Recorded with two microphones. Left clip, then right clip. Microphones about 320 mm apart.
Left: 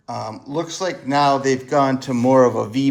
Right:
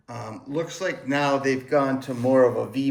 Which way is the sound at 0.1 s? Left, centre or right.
Centre.